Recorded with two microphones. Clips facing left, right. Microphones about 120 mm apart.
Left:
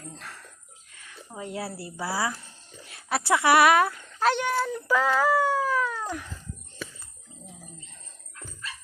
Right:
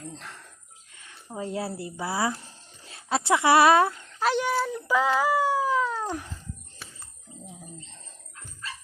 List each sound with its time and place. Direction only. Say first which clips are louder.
0.2 s speech: even; 20° right (ahead or behind)
4.2 s speech: even; centre (ahead or behind); by 6.2 s 30° right (ahead or behind)